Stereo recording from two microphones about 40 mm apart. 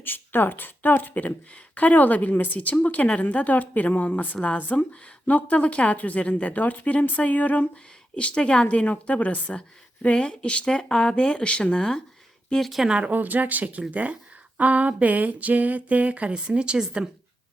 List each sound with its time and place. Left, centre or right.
0.0 s a woman's voice: left
4.8 s a woman's voice: left
8.1 s speech: left
13.1 s speech: right